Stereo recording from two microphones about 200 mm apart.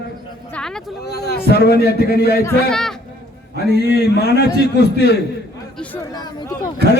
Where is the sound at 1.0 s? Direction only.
50° left (ahead or behind).